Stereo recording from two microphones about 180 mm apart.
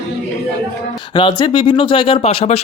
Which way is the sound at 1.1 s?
25° left (ahead or behind).